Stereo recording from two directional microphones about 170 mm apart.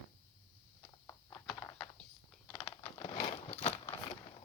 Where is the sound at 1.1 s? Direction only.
15° left (ahead or behind).